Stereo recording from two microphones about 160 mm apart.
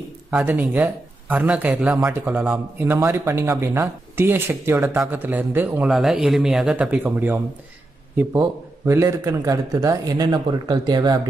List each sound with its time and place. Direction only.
0.3 s a man's voice: 10° right (ahead or behind); by 11.1 s 25° right (ahead or behind)